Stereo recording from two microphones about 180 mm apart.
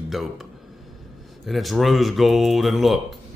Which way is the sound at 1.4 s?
Centre (ahead or behind).